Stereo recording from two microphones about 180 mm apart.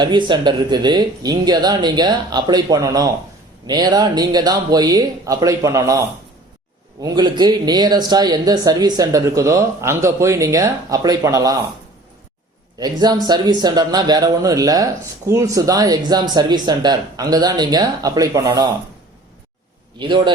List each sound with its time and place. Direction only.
0.0 s speech: 25° right (ahead or behind)
12.8 s speech: 20° right (ahead or behind)
20.0 s speech: 25° right (ahead or behind)